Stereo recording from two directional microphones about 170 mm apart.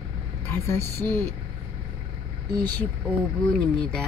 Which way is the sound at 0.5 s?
15° left (ahead or behind).